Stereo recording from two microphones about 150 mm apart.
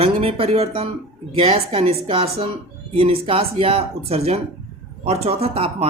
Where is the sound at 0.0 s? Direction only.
40° right (ahead or behind).